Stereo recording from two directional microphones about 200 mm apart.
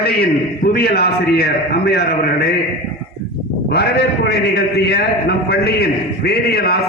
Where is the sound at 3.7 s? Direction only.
55° left (ahead or behind).